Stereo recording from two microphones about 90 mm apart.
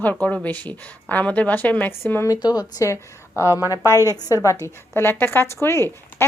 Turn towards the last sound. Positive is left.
turn(degrees=30)  # may be behind; listen again after turning